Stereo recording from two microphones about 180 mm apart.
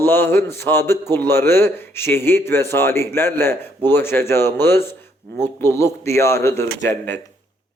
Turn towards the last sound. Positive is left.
turn(degrees=15)  # may be behind; listen again after turning